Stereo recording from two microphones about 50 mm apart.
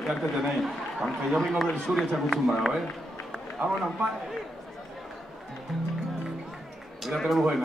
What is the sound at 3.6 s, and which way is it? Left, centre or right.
Speech, centre.